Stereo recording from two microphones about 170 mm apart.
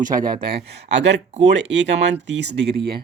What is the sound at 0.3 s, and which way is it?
Speech, 70° right (ahead or behind).